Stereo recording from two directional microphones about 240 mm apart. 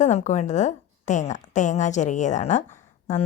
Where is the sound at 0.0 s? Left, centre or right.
Left.